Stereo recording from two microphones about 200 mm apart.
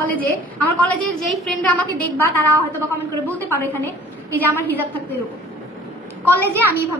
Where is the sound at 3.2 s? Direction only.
10° right (ahead or behind).